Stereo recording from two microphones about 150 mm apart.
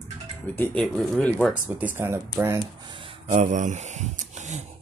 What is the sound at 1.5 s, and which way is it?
Speech, 10° right (ahead or behind).